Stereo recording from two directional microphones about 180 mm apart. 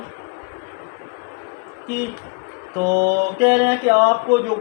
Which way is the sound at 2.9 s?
60° right (ahead or behind).